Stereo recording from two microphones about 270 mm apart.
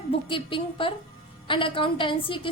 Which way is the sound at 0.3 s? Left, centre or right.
Centre.